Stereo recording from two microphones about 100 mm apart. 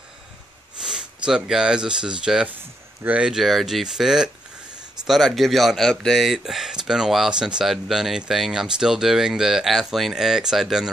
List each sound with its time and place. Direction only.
0.8 s speech: 5° right (ahead or behind)